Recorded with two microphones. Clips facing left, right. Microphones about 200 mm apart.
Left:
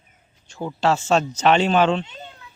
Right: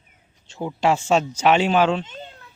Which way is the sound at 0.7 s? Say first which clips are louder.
Even; 15° right (ahead or behind).